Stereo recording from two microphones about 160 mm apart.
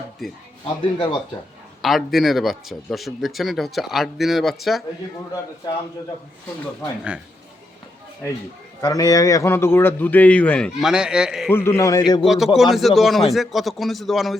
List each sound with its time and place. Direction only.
0.6 s speech: 30° left (ahead or behind)
1.8 s speech: centre (ahead or behind)
8.8 s a man's voice: 20° left (ahead or behind); by 11.5 s 5° right (ahead or behind)
11.5 s a man's voice: 15° left (ahead or behind)
12.2 s speech: centre (ahead or behind)